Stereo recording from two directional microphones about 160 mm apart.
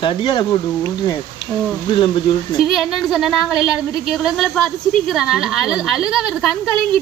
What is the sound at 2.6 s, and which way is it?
A woman's voice, centre (ahead or behind).